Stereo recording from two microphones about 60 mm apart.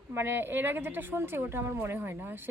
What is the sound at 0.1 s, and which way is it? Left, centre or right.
A woman's voice, right.